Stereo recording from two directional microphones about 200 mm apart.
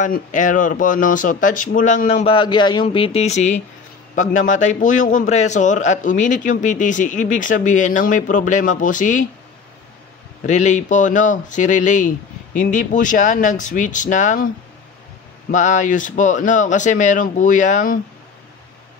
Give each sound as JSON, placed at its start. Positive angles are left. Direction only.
{"t": 0.0, "sound": "speech", "side_deg": 40}
{"t": 10.4, "sound": "speech", "side_deg": 35}
{"t": 15.5, "sound": "speech", "side_deg": 40}